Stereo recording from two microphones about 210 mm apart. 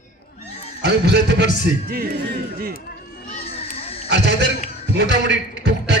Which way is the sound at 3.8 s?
30° left (ahead or behind).